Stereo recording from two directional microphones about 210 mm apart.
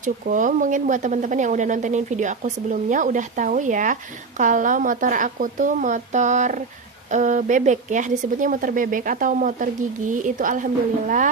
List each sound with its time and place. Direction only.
0.0 s speech: 35° right (ahead or behind)